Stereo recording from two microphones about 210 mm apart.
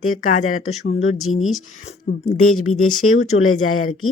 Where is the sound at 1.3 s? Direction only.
30° left (ahead or behind).